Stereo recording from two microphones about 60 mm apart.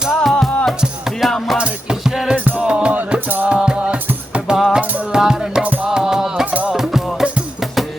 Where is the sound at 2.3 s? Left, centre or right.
Right.